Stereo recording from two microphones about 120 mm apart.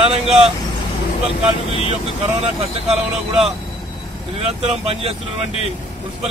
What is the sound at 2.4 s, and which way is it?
Speech, 55° right (ahead or behind).